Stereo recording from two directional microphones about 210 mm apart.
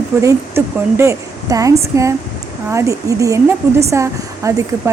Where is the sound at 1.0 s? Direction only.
15° right (ahead or behind).